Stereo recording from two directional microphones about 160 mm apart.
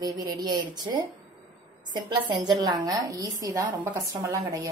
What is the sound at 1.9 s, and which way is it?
A woman's voice, 25° right (ahead or behind).